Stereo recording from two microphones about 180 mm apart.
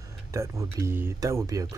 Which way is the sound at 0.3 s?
15° right (ahead or behind).